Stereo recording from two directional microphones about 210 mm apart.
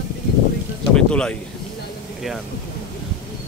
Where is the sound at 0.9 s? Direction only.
5° left (ahead or behind).